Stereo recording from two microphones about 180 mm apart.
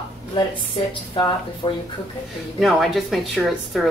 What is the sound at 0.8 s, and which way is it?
A woman's voice, 30° left (ahead or behind).